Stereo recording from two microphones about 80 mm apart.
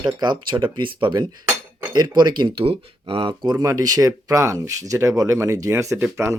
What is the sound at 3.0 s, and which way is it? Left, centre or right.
Speech, right.